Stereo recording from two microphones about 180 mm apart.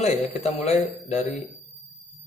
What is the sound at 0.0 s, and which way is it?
A man's voice, 40° left (ahead or behind).